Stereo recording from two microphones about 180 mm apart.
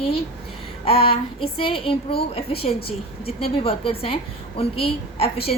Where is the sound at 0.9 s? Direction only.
30° left (ahead or behind).